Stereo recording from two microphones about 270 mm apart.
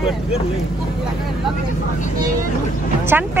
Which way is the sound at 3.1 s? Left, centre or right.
Centre.